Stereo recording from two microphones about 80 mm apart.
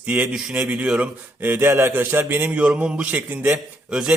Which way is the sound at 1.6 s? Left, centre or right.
Right.